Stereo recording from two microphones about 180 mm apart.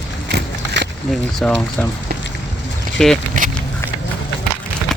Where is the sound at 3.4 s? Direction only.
50° right (ahead or behind).